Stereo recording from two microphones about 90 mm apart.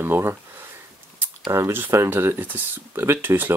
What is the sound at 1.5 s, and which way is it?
Speech, 25° right (ahead or behind).